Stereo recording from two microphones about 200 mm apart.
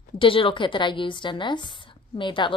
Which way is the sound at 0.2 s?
25° left (ahead or behind).